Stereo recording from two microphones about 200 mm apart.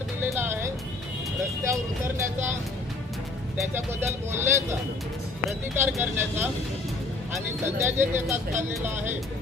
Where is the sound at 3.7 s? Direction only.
10° right (ahead or behind).